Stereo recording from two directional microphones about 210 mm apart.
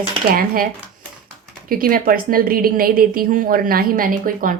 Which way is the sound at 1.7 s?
45° right (ahead or behind).